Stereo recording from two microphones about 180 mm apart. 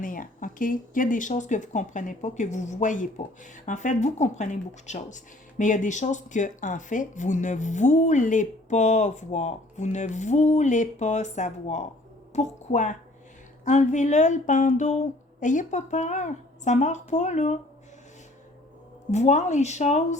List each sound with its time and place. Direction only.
0.0 s speech: 45° left (ahead or behind)
19.1 s speech: 40° left (ahead or behind)